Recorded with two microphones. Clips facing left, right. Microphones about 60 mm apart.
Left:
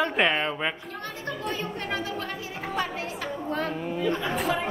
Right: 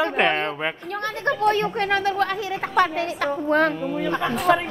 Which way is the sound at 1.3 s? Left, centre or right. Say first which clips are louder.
Right 12 dB; right.